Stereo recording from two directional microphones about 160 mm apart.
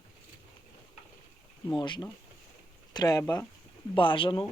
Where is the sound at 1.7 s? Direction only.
30° left (ahead or behind).